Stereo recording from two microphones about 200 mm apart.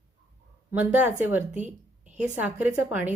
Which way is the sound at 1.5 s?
35° right (ahead or behind).